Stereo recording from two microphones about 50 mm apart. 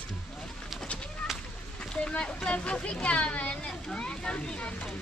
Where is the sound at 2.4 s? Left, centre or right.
Left.